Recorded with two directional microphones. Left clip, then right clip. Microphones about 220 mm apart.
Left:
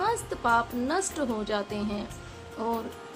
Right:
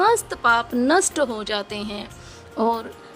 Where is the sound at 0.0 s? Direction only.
35° right (ahead or behind).